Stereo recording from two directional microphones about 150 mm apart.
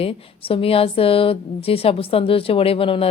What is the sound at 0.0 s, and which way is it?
A woman's voice, 40° left (ahead or behind).